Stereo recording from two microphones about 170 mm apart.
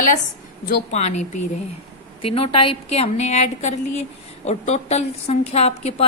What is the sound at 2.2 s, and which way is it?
A woman's voice, 35° left (ahead or behind).